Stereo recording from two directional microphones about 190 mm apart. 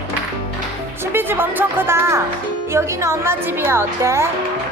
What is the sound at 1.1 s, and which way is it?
A woman's voice, 10° right (ahead or behind).